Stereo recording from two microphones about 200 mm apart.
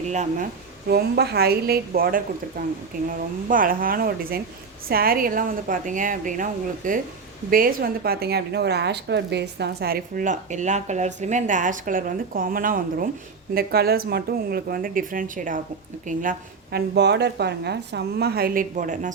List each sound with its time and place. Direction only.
0.1 s a woman's voice: 35° right (ahead or behind)
0.9 s a woman's voice: 55° right (ahead or behind)
16.7 s a woman's voice: 55° right (ahead or behind); by 19.1 s 40° right (ahead or behind)